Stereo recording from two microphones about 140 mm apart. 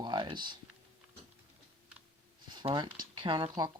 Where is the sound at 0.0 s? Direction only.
35° right (ahead or behind).